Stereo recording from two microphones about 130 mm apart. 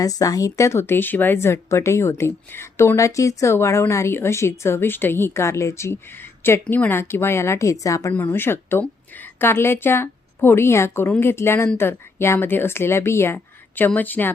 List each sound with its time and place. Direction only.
0.0 s a woman's voice: 30° left (ahead or behind)